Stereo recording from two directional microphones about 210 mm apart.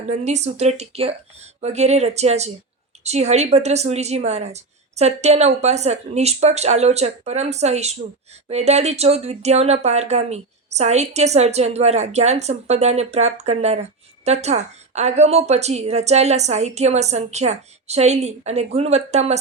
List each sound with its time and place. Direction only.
0.0 s speech: 35° right (ahead or behind)